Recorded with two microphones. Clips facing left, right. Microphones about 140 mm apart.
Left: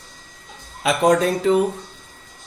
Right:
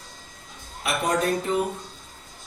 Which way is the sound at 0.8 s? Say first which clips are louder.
Left 8 dB; 90° left.